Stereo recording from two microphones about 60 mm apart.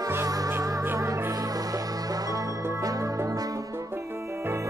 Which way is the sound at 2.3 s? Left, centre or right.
Right.